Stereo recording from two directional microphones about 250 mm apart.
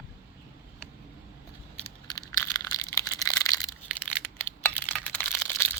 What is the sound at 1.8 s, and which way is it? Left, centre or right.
Crushing, centre.